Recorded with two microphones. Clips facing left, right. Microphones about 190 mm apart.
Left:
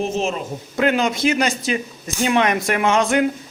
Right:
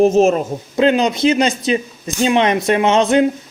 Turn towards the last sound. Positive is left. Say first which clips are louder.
# right 4 dB
turn(degrees=-20)  # may be behind; listen again after turning